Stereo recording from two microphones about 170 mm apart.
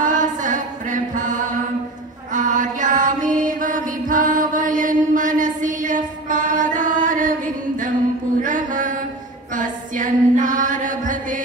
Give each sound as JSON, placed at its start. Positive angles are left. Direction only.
{"t": 0.0, "sound": "music", "side_deg": -50}
{"t": 2.3, "sound": "mantra", "side_deg": -50}
{"t": 9.5, "sound": "a sound", "side_deg": -50}